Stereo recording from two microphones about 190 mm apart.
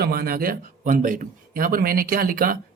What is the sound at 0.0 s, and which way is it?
Speech, 55° right (ahead or behind).